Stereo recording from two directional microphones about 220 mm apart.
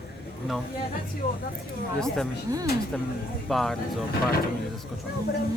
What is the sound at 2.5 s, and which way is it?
Speech, 15° right (ahead or behind).